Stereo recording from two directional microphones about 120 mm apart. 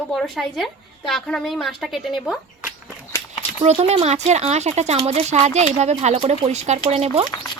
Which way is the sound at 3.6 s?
60° right (ahead or behind).